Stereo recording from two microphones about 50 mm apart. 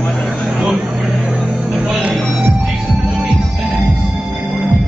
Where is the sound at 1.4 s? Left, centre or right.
Right.